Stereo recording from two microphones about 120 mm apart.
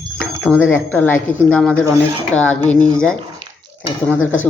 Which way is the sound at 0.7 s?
15° left (ahead or behind).